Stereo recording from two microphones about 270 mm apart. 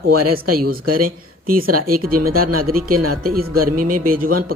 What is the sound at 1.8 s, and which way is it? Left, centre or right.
Speech, right.